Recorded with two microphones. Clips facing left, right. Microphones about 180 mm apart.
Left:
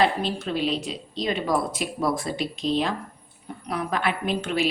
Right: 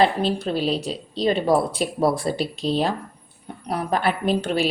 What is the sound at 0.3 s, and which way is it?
Speech, 35° right (ahead or behind).